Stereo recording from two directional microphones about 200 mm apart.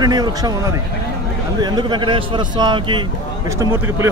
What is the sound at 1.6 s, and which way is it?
A man's voice, 20° right (ahead or behind).